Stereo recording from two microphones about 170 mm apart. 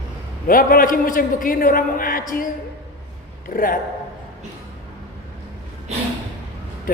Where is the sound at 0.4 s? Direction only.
55° left (ahead or behind).